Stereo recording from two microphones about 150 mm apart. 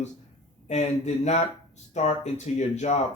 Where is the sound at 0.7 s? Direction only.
50° left (ahead or behind).